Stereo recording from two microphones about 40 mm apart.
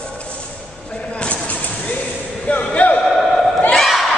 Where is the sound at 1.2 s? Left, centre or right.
Left.